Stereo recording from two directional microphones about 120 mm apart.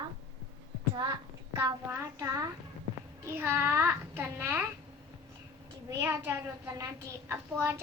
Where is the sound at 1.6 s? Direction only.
20° right (ahead or behind).